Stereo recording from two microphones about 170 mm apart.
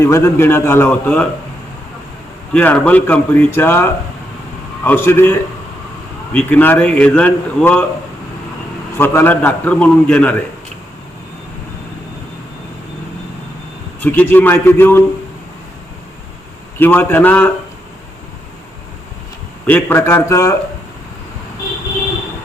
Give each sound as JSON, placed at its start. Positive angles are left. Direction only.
{"t": 0.0, "sound": "a man's voice", "side_deg": 15}
{"t": 2.5, "sound": "a man's voice", "side_deg": 5}
{"t": 6.3, "sound": "a man's voice", "side_deg": 10}
{"t": 9.0, "sound": "a man's voice", "side_deg": 10}
{"t": 14.0, "sound": "a man's voice", "side_deg": 10}
{"t": 16.7, "sound": "a man's voice", "side_deg": 10}
{"t": 19.6, "sound": "a man's voice", "side_deg": 15}